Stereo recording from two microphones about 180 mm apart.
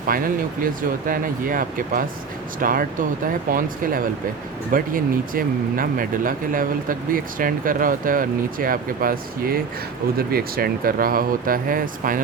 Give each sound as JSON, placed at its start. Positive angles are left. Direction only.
{"t": 0.1, "sound": "speech", "side_deg": -50}
{"t": 4.7, "sound": "speech", "side_deg": -50}